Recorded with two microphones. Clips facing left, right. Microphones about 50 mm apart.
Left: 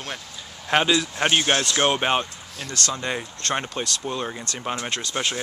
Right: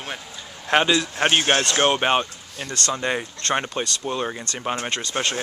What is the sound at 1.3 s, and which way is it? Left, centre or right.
Speech, right.